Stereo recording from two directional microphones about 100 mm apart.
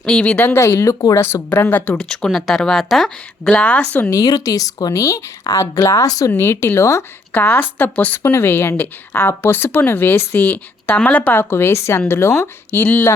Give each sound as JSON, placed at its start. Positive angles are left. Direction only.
{"t": 0.0, "sound": "a woman's voice", "side_deg": 10}
{"t": 3.6, "sound": "a woman's voice", "side_deg": 15}
{"t": 4.1, "sound": "speech", "side_deg": 40}
{"t": 7.3, "sound": "a woman's voice", "side_deg": 20}